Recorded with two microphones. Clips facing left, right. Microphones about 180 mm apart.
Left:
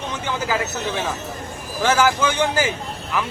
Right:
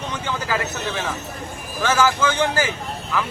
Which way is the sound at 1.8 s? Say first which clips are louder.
Left 1 dB; 15° left (ahead or behind).